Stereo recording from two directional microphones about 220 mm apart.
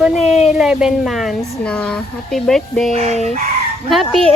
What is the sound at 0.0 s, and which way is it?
A woman's voice, centre (ahead or behind).